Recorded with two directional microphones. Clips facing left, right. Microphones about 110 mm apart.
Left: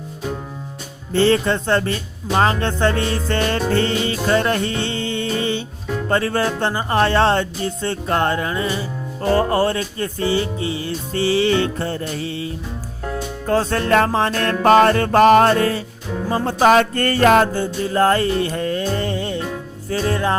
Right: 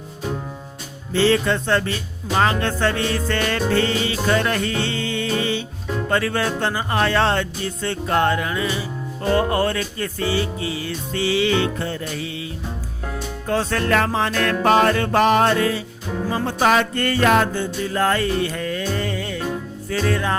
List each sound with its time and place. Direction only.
1.3 s music: 30° left (ahead or behind)
13.5 s music: 35° left (ahead or behind)